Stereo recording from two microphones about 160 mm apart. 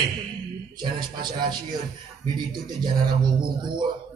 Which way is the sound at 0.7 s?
30° right (ahead or behind).